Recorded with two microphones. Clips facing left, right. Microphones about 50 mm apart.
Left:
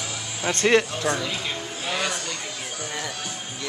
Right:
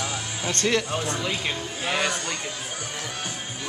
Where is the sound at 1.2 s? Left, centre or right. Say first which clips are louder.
Right 1 dB; right.